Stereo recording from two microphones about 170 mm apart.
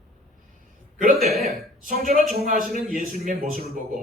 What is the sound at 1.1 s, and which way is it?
Speech, centre (ahead or behind).